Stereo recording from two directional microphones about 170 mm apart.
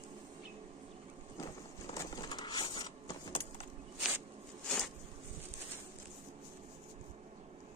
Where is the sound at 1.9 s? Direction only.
25° left (ahead or behind).